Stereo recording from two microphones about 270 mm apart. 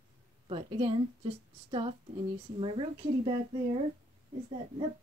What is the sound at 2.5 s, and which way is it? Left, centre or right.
Speech, centre.